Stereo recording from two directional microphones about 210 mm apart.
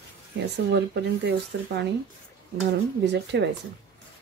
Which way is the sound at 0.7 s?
55° right (ahead or behind).